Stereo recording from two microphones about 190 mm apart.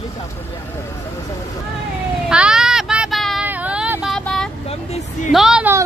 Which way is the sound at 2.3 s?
5° right (ahead or behind).